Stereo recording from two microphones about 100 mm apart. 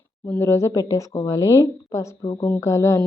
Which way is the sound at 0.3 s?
25° left (ahead or behind).